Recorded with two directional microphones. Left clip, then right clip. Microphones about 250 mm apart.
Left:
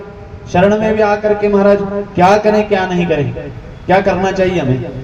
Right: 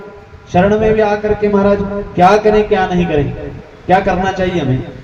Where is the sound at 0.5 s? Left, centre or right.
Left.